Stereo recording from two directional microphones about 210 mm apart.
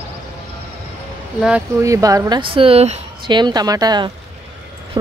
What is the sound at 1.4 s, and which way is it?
Speech, 10° right (ahead or behind).